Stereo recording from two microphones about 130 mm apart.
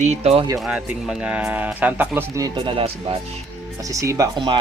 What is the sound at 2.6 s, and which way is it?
Speech, 45° right (ahead or behind).